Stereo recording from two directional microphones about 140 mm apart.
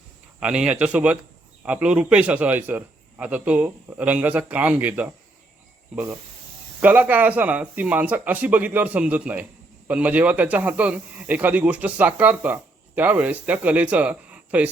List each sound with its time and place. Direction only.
0.3 s speech: 5° right (ahead or behind)